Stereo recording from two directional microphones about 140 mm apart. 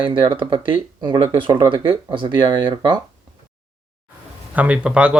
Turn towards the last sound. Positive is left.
turn(degrees=-5)  # may be behind; listen again after turning